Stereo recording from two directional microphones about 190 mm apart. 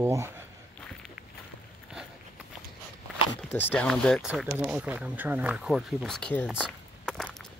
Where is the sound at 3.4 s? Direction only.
10° left (ahead or behind).